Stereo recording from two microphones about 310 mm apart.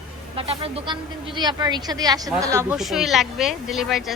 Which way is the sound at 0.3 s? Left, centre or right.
Centre.